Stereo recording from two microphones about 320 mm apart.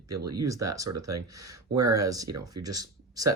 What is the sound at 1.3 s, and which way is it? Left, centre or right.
Speech, right.